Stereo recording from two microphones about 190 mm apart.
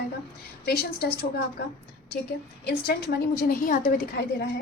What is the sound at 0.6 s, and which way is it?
Speech, 60° left (ahead or behind).